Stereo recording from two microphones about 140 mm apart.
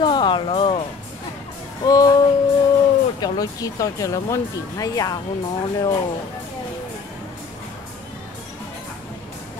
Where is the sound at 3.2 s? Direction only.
25° left (ahead or behind).